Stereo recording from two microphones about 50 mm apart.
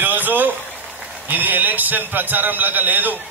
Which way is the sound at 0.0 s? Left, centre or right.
Right.